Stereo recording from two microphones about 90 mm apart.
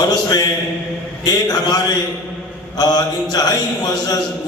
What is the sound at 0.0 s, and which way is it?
Mantra, 45° left (ahead or behind).